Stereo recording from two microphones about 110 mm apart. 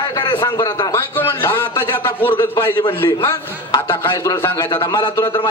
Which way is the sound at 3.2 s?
40° left (ahead or behind).